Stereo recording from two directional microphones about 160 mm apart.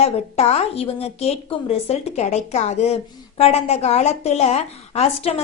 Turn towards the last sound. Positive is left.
turn(degrees=40)  # may be behind; listen again after turning